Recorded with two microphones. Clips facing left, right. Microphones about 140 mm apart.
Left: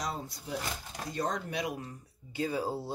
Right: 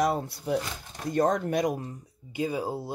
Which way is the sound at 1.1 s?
50° right (ahead or behind).